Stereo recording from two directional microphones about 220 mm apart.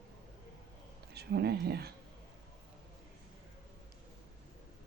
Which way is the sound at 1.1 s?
45° right (ahead or behind).